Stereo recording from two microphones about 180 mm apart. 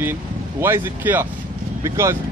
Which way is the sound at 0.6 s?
10° right (ahead or behind).